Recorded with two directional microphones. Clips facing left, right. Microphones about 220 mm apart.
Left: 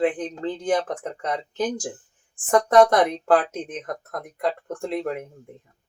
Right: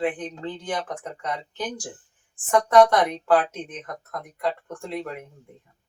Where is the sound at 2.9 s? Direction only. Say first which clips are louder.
Left 2 dB; 50° left (ahead or behind).